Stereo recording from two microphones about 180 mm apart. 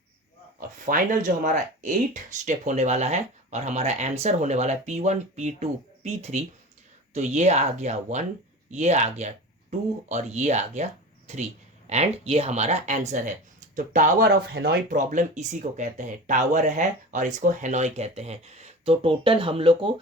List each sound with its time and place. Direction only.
0.9 s speech: 45° right (ahead or behind)
14.9 s speech: 45° right (ahead or behind)